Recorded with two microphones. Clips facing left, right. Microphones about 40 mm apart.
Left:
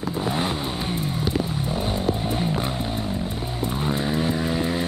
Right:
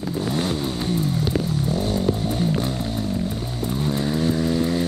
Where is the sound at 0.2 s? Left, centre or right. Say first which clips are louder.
Right 1 dB; centre.